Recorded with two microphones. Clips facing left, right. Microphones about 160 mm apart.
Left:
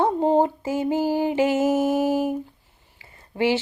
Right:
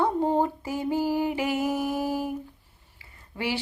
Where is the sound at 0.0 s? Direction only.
20° left (ahead or behind).